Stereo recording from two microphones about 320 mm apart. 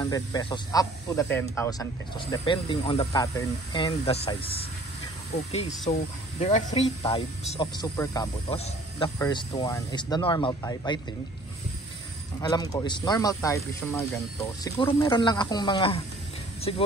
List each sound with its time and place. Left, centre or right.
0.0 s speech: centre
12.4 s speech: centre